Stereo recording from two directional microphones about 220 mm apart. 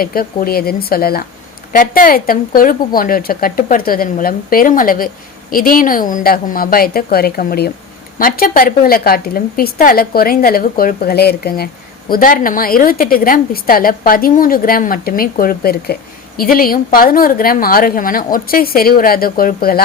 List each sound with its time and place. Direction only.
0.0 s a woman's voice: 40° left (ahead or behind)